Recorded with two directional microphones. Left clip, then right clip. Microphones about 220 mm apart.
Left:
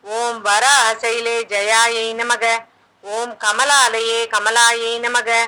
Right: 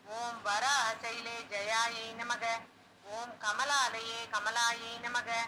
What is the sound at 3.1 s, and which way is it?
Speech, 50° left (ahead or behind).